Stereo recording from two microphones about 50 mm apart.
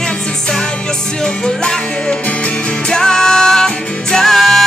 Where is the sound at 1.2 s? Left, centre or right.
Centre.